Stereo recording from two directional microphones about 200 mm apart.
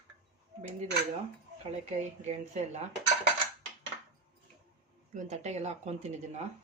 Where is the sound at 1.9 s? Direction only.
35° right (ahead or behind).